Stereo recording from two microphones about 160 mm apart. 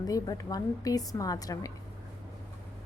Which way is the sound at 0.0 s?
25° left (ahead or behind).